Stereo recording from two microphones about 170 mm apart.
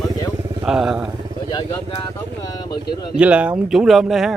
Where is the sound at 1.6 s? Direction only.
20° left (ahead or behind).